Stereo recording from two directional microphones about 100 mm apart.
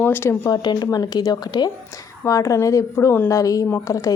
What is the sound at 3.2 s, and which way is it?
Speech, 35° left (ahead or behind).